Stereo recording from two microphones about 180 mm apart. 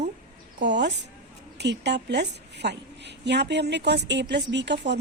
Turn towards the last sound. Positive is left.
turn(degrees=-75)  # may be behind; listen again after turning